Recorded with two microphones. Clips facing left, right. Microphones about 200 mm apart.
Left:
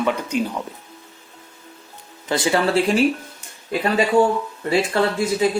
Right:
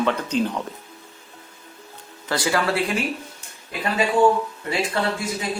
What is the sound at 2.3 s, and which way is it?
Speech, 20° left (ahead or behind).